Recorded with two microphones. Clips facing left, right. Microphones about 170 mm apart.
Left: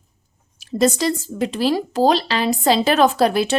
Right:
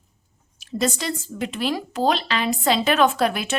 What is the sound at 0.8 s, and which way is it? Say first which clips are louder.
Speech: left 7 dB; 35° left (ahead or behind).